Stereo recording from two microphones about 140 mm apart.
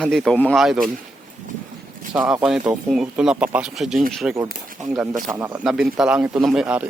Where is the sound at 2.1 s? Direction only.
10° right (ahead or behind).